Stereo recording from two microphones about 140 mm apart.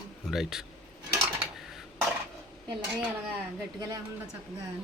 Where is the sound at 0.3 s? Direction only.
Centre (ahead or behind).